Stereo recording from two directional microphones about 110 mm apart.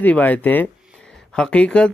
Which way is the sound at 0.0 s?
15° left (ahead or behind).